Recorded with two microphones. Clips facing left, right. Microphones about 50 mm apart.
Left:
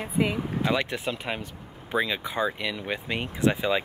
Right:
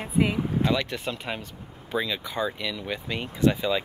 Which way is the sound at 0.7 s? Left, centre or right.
Left.